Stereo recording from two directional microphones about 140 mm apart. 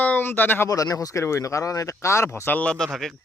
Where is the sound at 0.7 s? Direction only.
25° left (ahead or behind).